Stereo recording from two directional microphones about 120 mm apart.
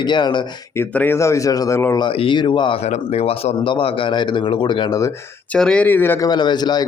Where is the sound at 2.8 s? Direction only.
65° left (ahead or behind); by 4.9 s 40° left (ahead or behind).